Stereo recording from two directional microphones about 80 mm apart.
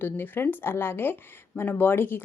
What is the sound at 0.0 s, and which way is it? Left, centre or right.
A woman's voice, left.